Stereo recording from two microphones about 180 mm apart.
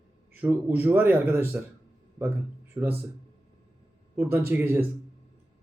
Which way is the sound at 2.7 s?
25° right (ahead or behind).